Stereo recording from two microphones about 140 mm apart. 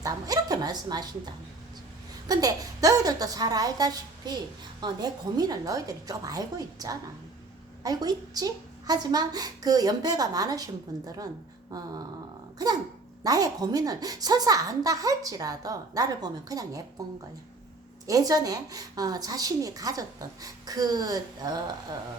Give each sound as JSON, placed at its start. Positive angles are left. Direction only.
{"t": 0.0, "sound": "a woman's voice", "side_deg": -25}
{"t": 13.2, "sound": "a woman's voice", "side_deg": -25}
{"t": 18.0, "sound": "a woman's voice", "side_deg": -25}